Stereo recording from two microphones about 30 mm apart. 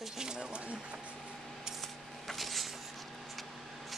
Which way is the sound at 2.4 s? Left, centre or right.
Centre.